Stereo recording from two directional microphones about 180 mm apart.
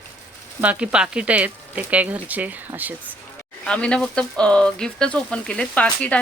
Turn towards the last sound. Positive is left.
turn(degrees=5)  # may be behind; listen again after turning